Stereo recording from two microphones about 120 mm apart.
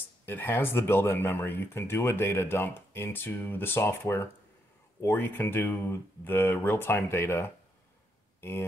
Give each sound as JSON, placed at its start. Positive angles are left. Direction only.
{"t": 0.2, "sound": "speech", "side_deg": 15}